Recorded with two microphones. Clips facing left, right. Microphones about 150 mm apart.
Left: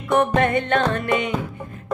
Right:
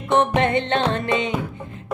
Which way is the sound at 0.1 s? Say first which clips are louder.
Even; 25° right (ahead or behind).